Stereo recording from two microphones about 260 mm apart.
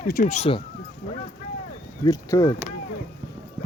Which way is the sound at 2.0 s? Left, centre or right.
Centre.